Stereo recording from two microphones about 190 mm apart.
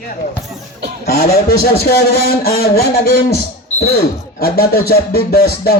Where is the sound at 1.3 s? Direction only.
55° left (ahead or behind).